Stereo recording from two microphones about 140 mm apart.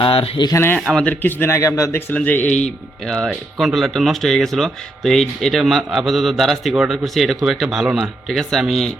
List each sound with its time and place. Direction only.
0.0 s speech: 40° left (ahead or behind)
0.5 s speech: 15° left (ahead or behind)
0.8 s speech: centre (ahead or behind)